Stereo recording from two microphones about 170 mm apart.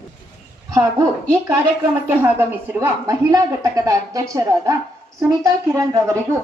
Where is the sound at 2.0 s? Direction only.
15° right (ahead or behind).